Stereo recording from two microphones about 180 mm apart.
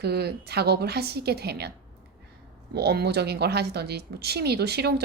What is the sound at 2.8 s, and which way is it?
A woman's voice, 65° right (ahead or behind).